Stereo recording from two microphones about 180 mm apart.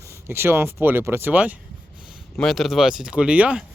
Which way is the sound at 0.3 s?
15° right (ahead or behind).